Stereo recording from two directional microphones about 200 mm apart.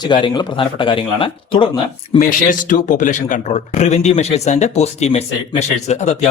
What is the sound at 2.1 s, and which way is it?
Speech, 40° left (ahead or behind).